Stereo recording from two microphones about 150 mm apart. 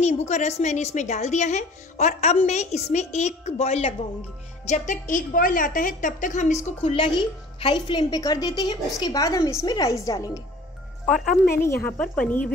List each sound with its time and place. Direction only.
0.0 s a woman's voice: 50° left (ahead or behind); by 10.4 s 25° left (ahead or behind)
11.5 s a woman's voice: 15° left (ahead or behind)